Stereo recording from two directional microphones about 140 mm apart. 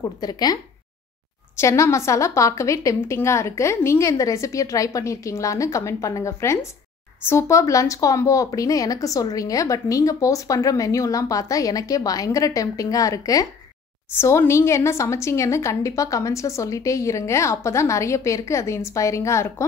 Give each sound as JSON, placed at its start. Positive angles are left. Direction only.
{"t": 0.2, "sound": "speech", "side_deg": 30}
{"t": 1.6, "sound": "speech", "side_deg": 20}